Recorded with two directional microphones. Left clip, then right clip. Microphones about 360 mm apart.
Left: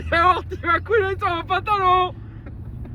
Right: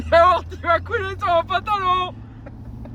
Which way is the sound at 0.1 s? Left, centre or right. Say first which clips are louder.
Right 3 dB; centre.